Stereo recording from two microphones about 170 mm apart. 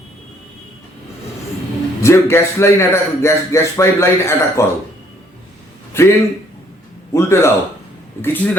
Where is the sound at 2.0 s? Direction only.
15° left (ahead or behind).